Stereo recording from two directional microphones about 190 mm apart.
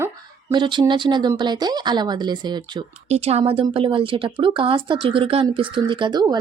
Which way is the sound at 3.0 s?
35° right (ahead or behind).